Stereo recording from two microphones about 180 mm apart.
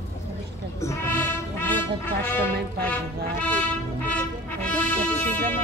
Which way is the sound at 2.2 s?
10° left (ahead or behind).